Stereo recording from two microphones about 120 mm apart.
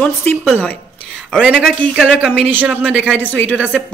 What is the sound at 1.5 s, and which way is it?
Speech, 5° left (ahead or behind).